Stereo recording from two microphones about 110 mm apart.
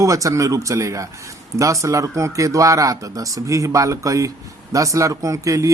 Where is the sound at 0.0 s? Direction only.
30° right (ahead or behind).